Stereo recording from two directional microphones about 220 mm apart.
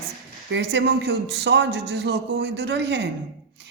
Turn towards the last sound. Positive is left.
turn(degrees=-50)  # may be behind; listen again after turning